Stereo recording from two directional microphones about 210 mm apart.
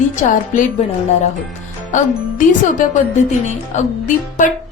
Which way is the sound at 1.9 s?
40° left (ahead or behind).